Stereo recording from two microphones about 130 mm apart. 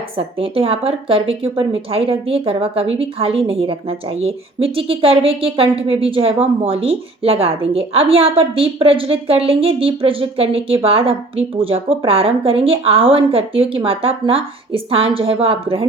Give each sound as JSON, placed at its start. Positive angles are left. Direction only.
{"t": 0.2, "sound": "speech", "side_deg": -45}